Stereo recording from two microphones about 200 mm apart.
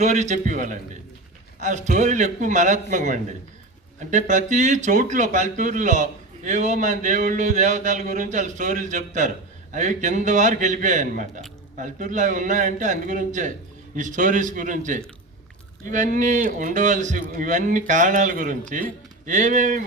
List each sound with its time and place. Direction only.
0.0 s speech: 35° right (ahead or behind)